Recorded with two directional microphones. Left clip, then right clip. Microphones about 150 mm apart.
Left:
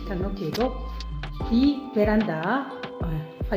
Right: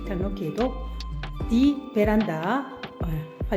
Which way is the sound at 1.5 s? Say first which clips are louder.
Even; 40° right (ahead or behind).